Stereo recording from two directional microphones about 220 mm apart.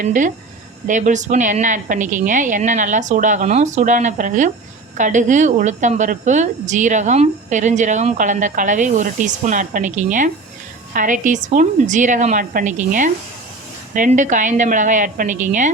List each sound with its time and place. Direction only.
0.0 s a woman's voice: 35° right (ahead or behind)